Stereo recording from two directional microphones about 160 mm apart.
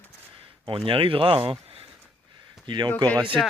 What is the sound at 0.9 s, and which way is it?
Speech, 35° right (ahead or behind).